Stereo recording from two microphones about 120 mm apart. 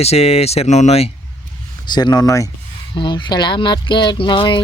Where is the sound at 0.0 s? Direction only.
60° left (ahead or behind).